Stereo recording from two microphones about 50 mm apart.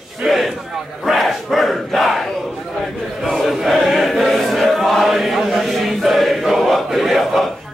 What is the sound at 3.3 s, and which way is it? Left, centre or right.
Chant, centre.